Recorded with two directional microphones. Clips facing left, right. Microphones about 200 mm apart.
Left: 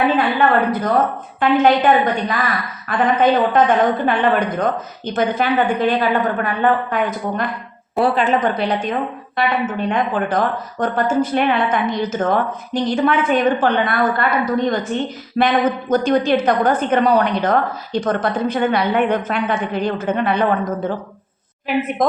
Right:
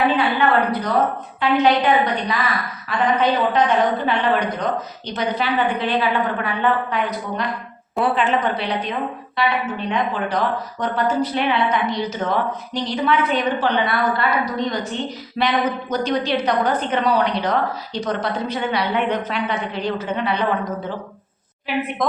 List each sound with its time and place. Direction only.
0.7 s a woman's voice: 50° left (ahead or behind)
7.9 s a woman's voice: 40° left (ahead or behind)